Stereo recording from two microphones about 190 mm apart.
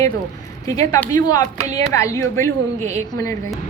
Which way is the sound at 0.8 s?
15° left (ahead or behind).